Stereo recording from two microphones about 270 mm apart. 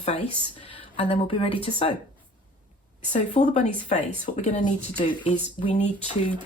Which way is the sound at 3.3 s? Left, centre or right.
Left.